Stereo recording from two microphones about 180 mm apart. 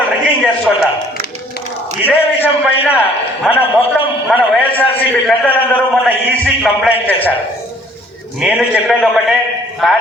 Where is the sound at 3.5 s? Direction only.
30° left (ahead or behind).